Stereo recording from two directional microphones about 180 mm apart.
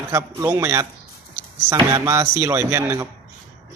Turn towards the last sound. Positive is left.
turn(degrees=-15)  # may be behind; listen again after turning